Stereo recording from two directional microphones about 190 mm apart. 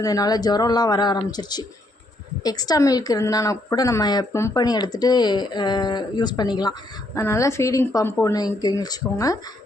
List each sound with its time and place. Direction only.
0.0 s a woman's voice: 20° left (ahead or behind)